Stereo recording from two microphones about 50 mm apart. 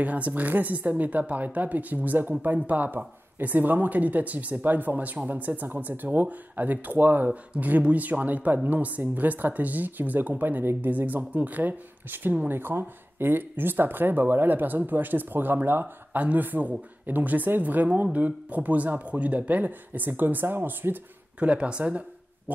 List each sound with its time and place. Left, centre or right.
0.0 s speech: right
21.4 s speech: right